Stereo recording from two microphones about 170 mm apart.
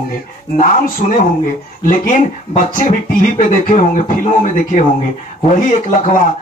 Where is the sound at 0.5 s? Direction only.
55° left (ahead or behind).